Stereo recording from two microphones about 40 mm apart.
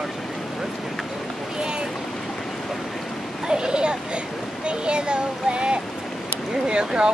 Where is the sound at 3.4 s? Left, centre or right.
Right.